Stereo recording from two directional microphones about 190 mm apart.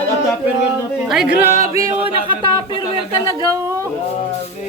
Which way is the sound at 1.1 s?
Centre (ahead or behind).